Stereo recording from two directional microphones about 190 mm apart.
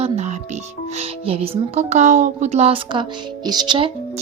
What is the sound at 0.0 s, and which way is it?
A woman's voice, 35° right (ahead or behind).